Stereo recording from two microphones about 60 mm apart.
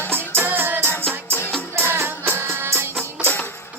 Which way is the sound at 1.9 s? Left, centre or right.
Right.